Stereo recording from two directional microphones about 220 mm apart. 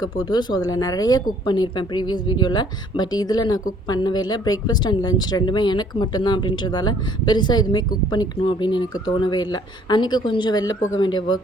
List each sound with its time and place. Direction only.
0.0 s speech: 20° left (ahead or behind)